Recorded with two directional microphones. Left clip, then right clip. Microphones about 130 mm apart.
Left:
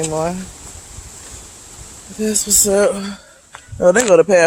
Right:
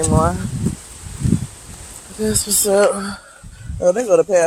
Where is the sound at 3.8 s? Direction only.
90° left.